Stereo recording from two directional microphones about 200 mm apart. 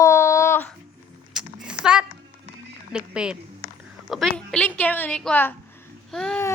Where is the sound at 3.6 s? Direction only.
45° left (ahead or behind).